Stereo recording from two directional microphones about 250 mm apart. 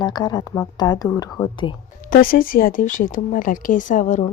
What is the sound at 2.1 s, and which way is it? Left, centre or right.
Speech, left.